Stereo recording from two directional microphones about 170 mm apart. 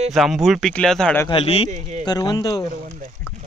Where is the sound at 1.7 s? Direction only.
45° right (ahead or behind).